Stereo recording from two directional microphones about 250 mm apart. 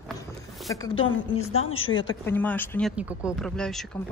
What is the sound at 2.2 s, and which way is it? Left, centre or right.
A woman's voice, centre.